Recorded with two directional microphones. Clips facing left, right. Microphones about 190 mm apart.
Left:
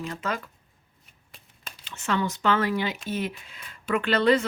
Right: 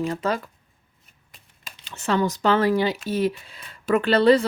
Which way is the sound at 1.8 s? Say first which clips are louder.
Right 5 dB; 35° right (ahead or behind).